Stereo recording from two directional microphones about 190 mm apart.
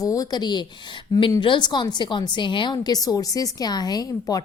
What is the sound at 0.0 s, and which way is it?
A woman's voice, 20° left (ahead or behind).